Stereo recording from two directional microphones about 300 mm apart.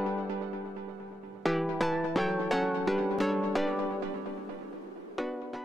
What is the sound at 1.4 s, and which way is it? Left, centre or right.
Music, centre.